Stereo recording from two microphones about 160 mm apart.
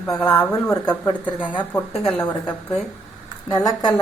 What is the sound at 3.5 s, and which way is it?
Speech, 25° left (ahead or behind).